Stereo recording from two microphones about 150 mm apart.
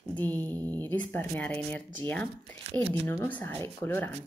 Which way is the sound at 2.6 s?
45° right (ahead or behind).